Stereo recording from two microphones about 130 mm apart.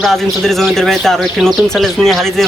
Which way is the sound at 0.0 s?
Centre (ahead or behind).